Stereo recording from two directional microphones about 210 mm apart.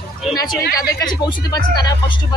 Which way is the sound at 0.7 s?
15° left (ahead or behind).